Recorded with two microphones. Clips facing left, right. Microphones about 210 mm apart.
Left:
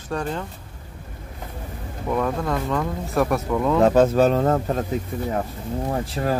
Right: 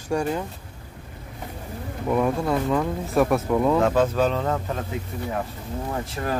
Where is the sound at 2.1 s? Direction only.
5° right (ahead or behind).